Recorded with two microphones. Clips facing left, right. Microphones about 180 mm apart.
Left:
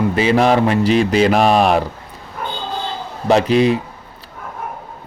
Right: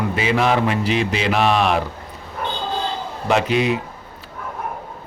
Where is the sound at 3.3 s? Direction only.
35° left (ahead or behind).